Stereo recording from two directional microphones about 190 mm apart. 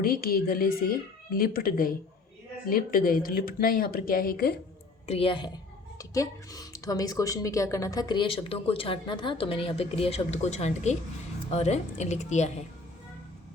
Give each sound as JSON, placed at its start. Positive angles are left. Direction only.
{"t": 0.0, "sound": "speech", "side_deg": 50}
{"t": 5.0, "sound": "a woman's voice", "side_deg": 30}